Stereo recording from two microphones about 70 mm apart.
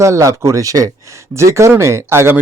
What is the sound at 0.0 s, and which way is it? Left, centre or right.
Speech, right.